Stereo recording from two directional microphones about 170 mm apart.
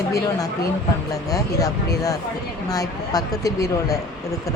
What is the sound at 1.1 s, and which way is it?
Speech, 20° left (ahead or behind).